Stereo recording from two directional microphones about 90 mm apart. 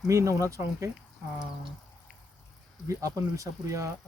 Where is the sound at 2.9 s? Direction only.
35° right (ahead or behind).